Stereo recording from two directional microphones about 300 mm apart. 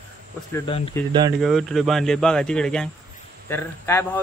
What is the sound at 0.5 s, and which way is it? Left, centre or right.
Speech, centre.